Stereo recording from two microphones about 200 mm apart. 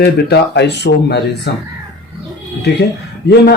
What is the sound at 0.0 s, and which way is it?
Speech, 55° left (ahead or behind).